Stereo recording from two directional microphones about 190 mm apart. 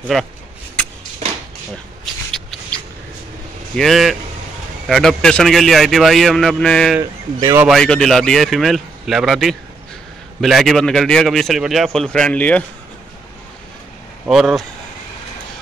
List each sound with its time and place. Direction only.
0.1 s a man's voice: centre (ahead or behind)
3.7 s a man's voice: centre (ahead or behind)
7.0 s speech: 20° right (ahead or behind)
7.6 s a man's voice: centre (ahead or behind)
14.2 s a man's voice: 5° right (ahead or behind)